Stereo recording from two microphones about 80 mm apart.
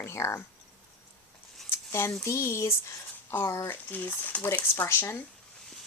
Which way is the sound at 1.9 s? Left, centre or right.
Left.